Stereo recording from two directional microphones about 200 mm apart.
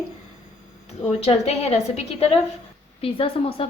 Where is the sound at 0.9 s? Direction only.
30° left (ahead or behind).